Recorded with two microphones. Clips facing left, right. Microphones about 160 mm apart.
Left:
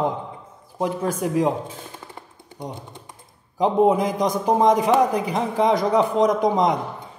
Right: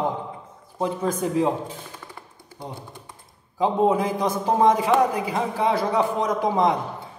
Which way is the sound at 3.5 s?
15° left (ahead or behind).